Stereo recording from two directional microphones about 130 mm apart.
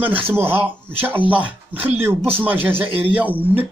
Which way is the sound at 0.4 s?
15° right (ahead or behind).